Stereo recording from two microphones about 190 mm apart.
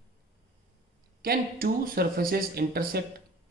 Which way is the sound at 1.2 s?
50° right (ahead or behind).